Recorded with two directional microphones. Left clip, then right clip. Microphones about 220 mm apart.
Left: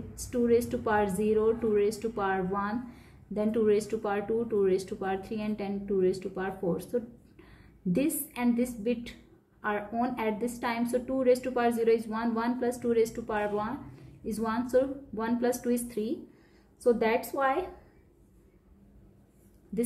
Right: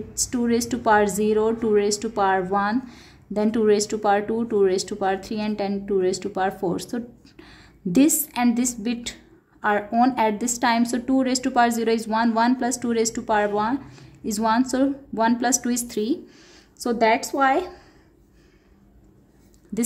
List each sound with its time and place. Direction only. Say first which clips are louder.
0.1 s a woman's voice: right 2 dB; 55° right (ahead or behind)